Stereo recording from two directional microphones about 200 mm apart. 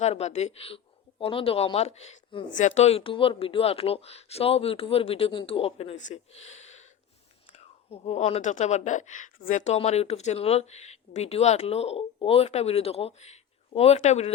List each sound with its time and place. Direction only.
0.0 s speech: 35° left (ahead or behind)